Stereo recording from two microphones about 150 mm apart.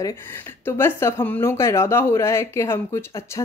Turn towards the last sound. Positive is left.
turn(degrees=20)  # may be behind; listen again after turning